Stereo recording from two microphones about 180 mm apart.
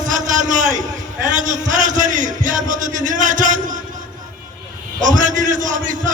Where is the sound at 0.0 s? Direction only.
45° right (ahead or behind).